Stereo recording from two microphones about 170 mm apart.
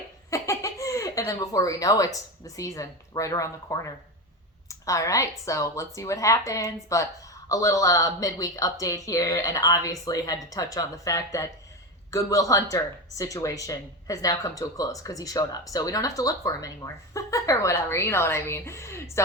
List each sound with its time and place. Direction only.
0.3 s a woman's voice: 20° left (ahead or behind)